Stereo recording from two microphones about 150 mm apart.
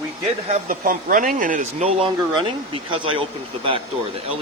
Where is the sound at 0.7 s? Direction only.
70° right (ahead or behind).